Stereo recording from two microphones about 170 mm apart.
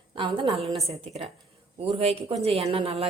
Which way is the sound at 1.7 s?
40° right (ahead or behind).